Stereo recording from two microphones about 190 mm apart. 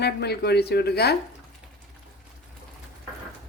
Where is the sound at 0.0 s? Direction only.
60° left (ahead or behind).